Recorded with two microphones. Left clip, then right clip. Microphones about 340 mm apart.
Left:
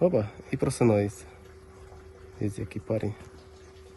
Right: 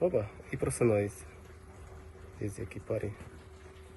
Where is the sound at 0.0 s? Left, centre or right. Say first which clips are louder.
Left 5 dB; left.